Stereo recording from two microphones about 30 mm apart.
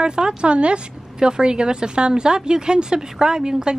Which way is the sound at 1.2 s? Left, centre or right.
Right.